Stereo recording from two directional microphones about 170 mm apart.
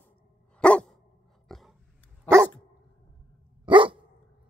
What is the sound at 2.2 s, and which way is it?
Dog, 15° right (ahead or behind).